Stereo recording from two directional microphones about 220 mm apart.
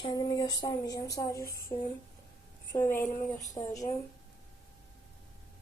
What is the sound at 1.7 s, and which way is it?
Speech, 25° left (ahead or behind).